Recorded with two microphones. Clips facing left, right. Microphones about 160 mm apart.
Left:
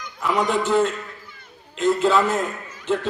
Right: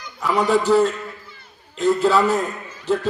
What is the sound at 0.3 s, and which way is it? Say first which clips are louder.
Speech: right 4 dB; 35° right (ahead or behind).